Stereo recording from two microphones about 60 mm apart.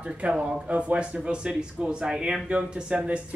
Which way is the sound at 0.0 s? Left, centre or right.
Centre.